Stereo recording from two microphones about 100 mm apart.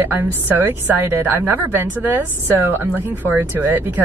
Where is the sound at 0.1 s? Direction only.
20° right (ahead or behind).